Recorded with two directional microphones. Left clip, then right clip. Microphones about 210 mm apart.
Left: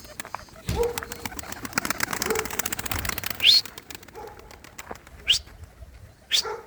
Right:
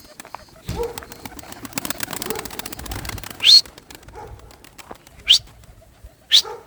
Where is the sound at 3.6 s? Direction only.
50° left (ahead or behind).